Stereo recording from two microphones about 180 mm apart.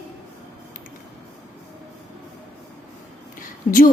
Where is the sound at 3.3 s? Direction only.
50° left (ahead or behind).